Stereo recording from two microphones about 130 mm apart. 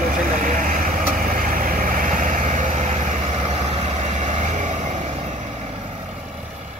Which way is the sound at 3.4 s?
55° right (ahead or behind).